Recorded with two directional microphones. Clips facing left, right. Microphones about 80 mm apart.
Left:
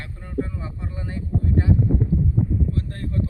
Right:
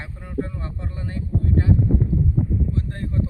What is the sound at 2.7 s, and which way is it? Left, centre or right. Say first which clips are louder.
Speech: right 1 dB; right.